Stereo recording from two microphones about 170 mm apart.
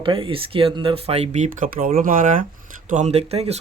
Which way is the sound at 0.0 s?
30° right (ahead or behind).